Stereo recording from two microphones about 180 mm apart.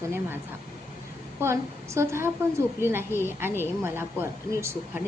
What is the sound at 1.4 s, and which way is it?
A woman's voice, 15° right (ahead or behind).